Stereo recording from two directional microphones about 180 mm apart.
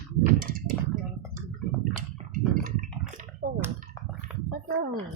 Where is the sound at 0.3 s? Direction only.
50° right (ahead or behind).